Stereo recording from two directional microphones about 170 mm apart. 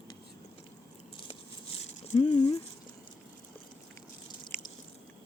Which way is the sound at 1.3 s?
40° left (ahead or behind).